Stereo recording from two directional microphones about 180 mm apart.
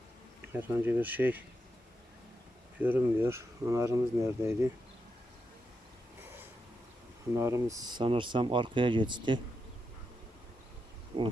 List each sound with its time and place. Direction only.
0.5 s speech: 10° right (ahead or behind)
2.7 s speech: 10° right (ahead or behind)
7.3 s speech: 15° right (ahead or behind)
11.1 s speech: 30° right (ahead or behind)